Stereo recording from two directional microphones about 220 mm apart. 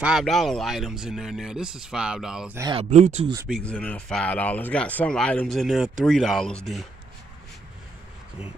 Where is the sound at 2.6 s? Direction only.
25° right (ahead or behind).